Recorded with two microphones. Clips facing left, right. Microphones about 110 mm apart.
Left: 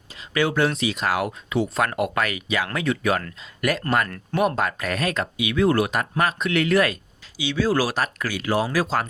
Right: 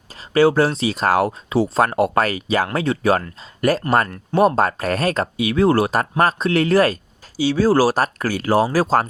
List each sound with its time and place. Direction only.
0.1 s speech: 35° right (ahead or behind)